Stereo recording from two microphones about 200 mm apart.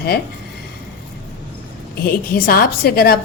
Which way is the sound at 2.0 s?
50° left (ahead or behind).